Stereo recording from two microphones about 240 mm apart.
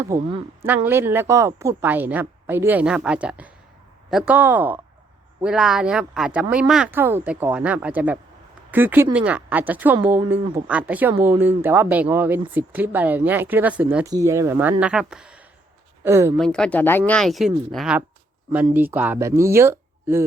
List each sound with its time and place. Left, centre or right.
0.0 s a woman's voice: centre
16.4 s a woman's voice: centre